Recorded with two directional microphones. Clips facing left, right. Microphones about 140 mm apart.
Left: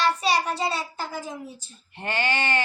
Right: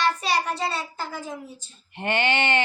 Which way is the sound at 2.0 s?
20° right (ahead or behind).